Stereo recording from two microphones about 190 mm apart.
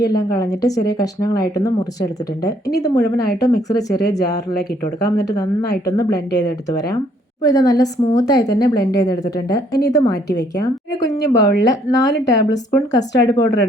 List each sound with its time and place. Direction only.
0.0 s a woman's voice: 20° left (ahead or behind)